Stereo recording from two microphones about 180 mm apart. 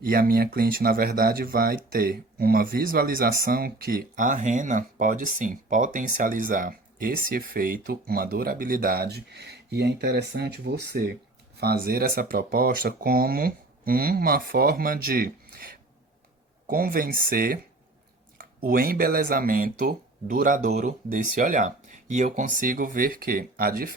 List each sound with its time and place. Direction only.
0.0 s speech: 55° right (ahead or behind)
16.6 s speech: 50° right (ahead or behind)